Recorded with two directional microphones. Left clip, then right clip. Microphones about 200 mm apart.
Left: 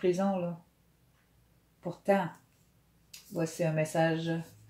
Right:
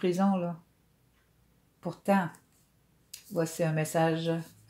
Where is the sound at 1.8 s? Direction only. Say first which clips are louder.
Even; 40° right (ahead or behind).